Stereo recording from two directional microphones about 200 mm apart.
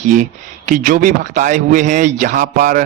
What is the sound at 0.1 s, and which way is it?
A man's voice, 40° right (ahead or behind).